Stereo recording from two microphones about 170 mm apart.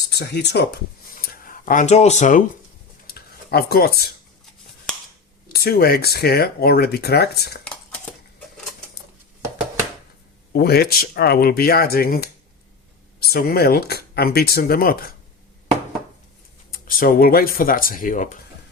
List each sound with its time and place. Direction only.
0.1 s speech: 75° left (ahead or behind)
1.1 s a sound: 60° left (ahead or behind)
3.1 s a sound: 65° left (ahead or behind)
5.5 s speech: 65° left (ahead or behind)
10.5 s speech: 70° left (ahead or behind)
16.7 s speech: 55° left (ahead or behind)